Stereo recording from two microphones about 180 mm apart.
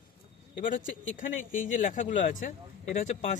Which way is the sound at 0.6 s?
45° left (ahead or behind).